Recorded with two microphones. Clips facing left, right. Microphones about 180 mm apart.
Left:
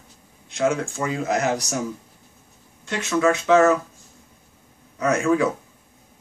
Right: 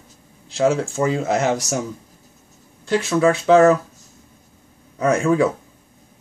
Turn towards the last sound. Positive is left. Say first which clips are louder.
# right 2 dB
turn(degrees=-30)  # may be behind; listen again after turning